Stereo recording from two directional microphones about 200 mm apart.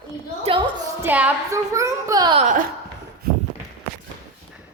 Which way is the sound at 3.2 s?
50° right (ahead or behind).